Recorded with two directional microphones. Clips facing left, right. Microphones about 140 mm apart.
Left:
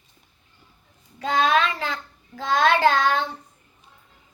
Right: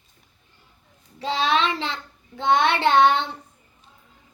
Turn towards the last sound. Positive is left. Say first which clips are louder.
# right 2 dB
turn(degrees=-25)  # may be behind; listen again after turning